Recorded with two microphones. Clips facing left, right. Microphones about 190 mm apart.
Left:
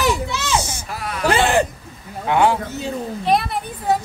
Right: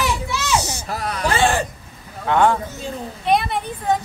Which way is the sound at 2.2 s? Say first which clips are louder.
Even; 10° left (ahead or behind).